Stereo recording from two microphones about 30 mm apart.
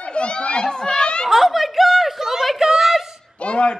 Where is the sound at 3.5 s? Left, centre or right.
Left.